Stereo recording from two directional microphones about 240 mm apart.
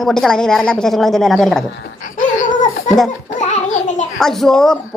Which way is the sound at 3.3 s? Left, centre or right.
Left.